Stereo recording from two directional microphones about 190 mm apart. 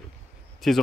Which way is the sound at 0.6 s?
Centre (ahead or behind).